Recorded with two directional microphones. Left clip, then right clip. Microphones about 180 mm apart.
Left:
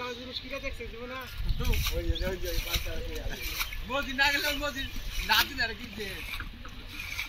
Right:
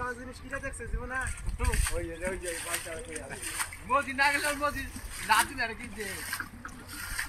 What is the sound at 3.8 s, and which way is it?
A man's voice, 40° left (ahead or behind).